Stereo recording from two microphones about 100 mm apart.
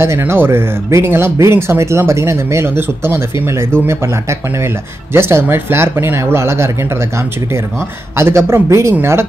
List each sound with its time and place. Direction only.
0.0 s speech: 25° right (ahead or behind)
8.2 s speech: 25° right (ahead or behind)